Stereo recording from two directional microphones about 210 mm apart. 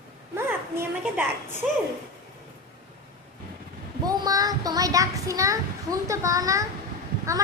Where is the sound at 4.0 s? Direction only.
20° right (ahead or behind).